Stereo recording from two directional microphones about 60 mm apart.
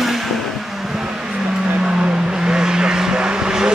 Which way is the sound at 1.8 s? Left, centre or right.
Centre.